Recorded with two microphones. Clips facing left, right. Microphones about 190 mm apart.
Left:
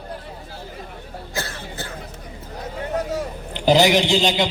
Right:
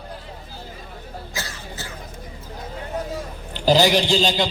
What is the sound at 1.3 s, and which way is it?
Cough, 60° left (ahead or behind).